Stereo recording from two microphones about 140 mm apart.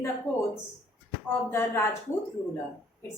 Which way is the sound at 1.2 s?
15° left (ahead or behind).